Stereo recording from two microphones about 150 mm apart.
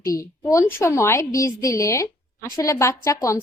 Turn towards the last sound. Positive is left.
turn(degrees=20)  # may be behind; listen again after turning